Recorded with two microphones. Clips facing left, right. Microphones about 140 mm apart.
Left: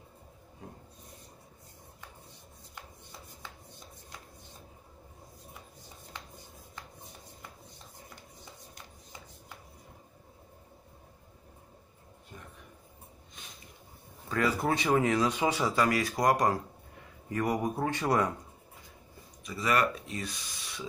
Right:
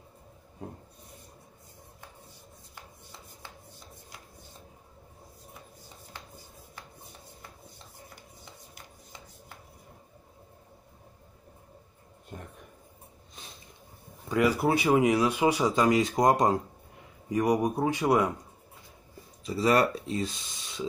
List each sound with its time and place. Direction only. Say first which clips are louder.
12.3 s a sound: right 6 dB; 50° right (ahead or behind)
14.3 s speech: right 4 dB; 15° right (ahead or behind)
19.4 s speech: right 5 dB; 30° right (ahead or behind)